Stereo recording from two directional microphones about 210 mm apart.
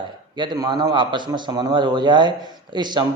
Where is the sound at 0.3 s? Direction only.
20° right (ahead or behind).